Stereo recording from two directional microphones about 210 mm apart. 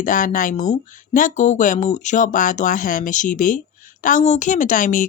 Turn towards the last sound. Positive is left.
turn(degrees=40)  # may be behind; listen again after turning